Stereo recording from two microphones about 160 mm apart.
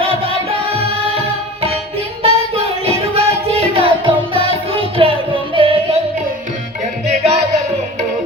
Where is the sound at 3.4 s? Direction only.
35° right (ahead or behind).